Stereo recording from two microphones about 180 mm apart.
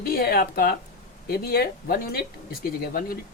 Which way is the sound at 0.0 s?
60° left (ahead or behind).